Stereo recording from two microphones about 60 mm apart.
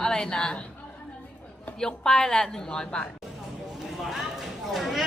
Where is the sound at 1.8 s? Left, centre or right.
Centre.